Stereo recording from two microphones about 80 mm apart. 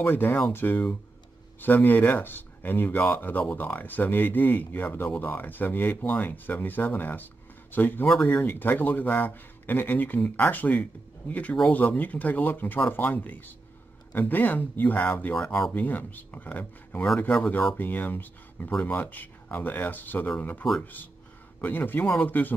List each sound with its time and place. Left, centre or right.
0.0 s speech: left
15.3 s speech: centre
15.7 s a man's voice: left